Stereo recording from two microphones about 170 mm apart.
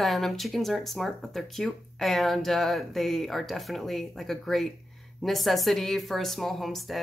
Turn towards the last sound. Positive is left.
turn(degrees=0)  # may be behind; listen again after turning